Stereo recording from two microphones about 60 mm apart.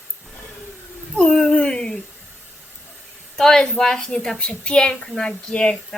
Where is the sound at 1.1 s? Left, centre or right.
Centre.